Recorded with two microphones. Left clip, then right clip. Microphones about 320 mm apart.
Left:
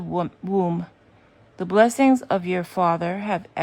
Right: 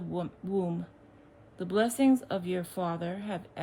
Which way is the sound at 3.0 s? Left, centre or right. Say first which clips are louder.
Left 11 dB; centre.